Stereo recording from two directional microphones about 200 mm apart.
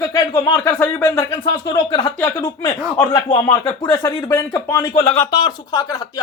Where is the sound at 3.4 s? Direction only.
15° left (ahead or behind).